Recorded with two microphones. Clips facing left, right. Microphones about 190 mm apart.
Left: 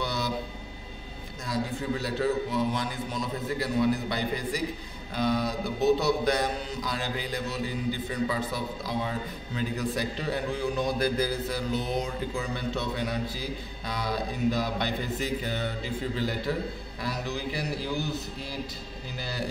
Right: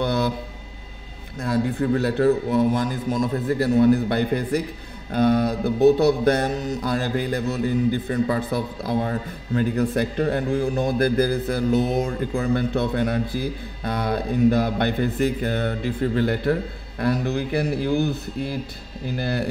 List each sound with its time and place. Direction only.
0.0 s a sound: 55° right (ahead or behind)
1.4 s a man's voice: 60° right (ahead or behind)
5.1 s music: 55° right (ahead or behind)
17.0 s a man's voice: 55° right (ahead or behind)